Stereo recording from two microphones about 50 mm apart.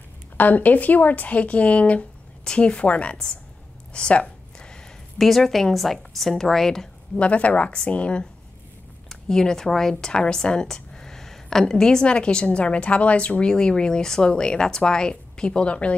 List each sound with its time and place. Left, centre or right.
0.4 s speech: left
3.9 s a sound: left
5.2 s a woman's voice: centre
7.2 s speech: left
9.1 s a woman's voice: centre